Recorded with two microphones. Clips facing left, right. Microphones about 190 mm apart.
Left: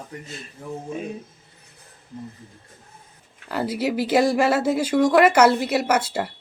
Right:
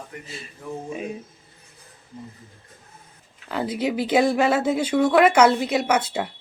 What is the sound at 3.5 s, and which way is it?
Speech, 5° left (ahead or behind).